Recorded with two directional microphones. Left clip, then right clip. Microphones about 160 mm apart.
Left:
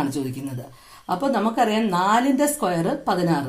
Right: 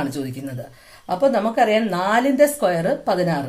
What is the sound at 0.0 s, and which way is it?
Speech, 25° right (ahead or behind).